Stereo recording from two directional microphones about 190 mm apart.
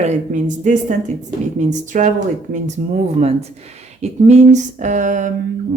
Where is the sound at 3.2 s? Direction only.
35° right (ahead or behind).